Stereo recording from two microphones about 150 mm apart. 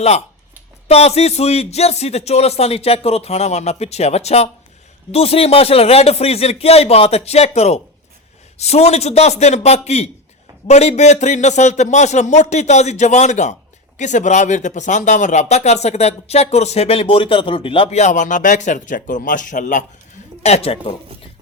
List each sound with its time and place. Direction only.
0.9 s speech: 45° left (ahead or behind); by 19.8 s 60° left (ahead or behind)
20.4 s speech: 45° left (ahead or behind)